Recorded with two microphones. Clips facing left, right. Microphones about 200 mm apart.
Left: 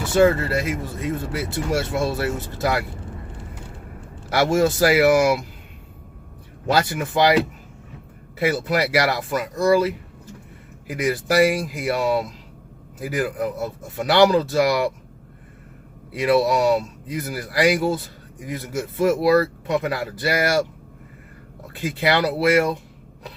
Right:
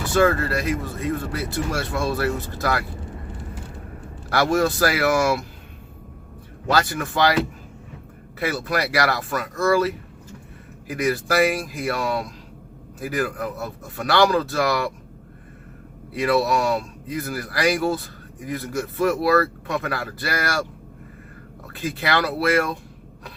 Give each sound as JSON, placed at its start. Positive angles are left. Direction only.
{"t": 0.1, "sound": "speech", "side_deg": 20}
{"t": 4.3, "sound": "speech", "side_deg": 20}
{"t": 6.7, "sound": "speech", "side_deg": 20}
{"t": 8.4, "sound": "speech", "side_deg": 20}
{"t": 16.1, "sound": "speech", "side_deg": 20}
{"t": 21.7, "sound": "speech", "side_deg": 20}